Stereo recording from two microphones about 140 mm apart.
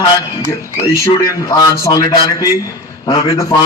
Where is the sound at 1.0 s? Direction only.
25° left (ahead or behind).